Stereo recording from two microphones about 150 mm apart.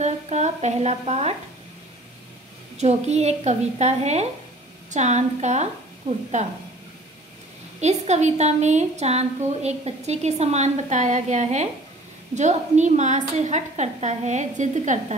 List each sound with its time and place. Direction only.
0.0 s a woman's voice: 50° right (ahead or behind)
2.8 s a woman's voice: 45° right (ahead or behind)
7.8 s a woman's voice: 50° right (ahead or behind)